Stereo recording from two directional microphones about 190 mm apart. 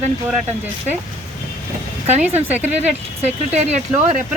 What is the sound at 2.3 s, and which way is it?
Speech, 10° right (ahead or behind).